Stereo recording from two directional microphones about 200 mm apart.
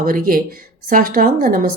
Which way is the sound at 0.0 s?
45° right (ahead or behind).